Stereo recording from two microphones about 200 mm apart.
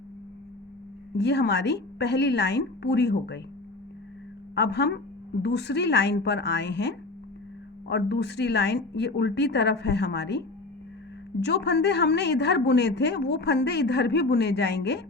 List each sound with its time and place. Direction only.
1.1 s a woman's voice: 55° left (ahead or behind)
4.5 s a woman's voice: 55° left (ahead or behind)